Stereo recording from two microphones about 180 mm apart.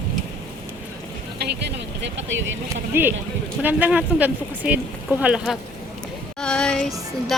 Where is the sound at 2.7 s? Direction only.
10° right (ahead or behind); by 6.9 s 5° left (ahead or behind).